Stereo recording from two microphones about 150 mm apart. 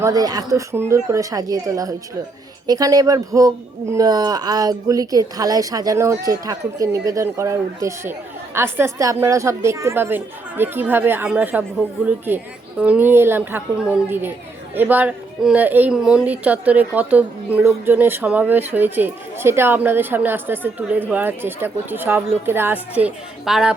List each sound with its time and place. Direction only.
0.0 s a woman's voice: 25° right (ahead or behind); by 23.7 s 5° right (ahead or behind)